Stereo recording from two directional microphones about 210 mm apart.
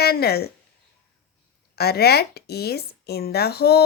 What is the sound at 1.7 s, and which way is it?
A woman's voice, 50° left (ahead or behind).